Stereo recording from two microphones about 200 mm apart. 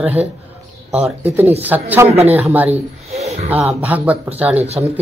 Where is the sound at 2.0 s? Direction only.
30° right (ahead or behind).